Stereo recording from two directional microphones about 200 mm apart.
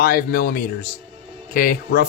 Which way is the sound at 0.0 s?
50° left (ahead or behind).